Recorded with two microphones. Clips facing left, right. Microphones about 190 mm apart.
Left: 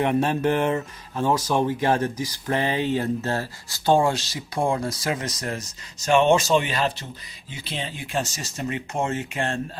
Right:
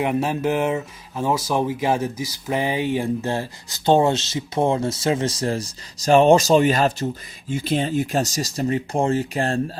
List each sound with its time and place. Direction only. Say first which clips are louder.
0.0 s speech: even; 5° right (ahead or behind); by 9.7 s 35° right (ahead or behind)